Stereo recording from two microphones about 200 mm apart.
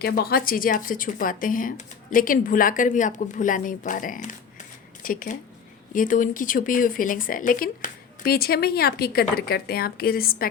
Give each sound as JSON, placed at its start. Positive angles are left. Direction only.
{"t": 0.0, "sound": "speech", "side_deg": 50}